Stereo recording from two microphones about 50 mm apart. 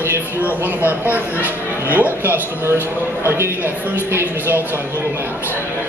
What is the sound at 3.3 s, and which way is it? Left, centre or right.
Speech, right.